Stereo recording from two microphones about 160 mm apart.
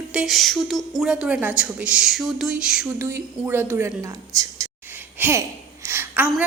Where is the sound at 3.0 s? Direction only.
15° right (ahead or behind).